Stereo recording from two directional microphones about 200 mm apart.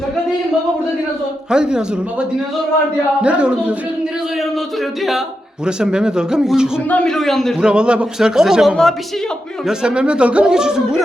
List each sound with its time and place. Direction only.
1.5 s a man's voice: 5° right (ahead or behind)
3.2 s a man's voice: 5° right (ahead or behind)
5.6 s a man's voice: 5° right (ahead or behind)